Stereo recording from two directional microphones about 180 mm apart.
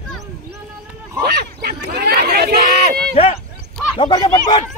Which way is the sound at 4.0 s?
20° left (ahead or behind).